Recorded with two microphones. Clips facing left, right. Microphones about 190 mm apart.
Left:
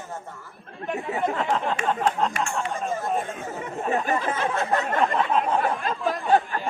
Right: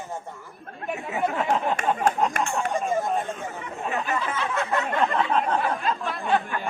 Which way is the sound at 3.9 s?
45° left (ahead or behind).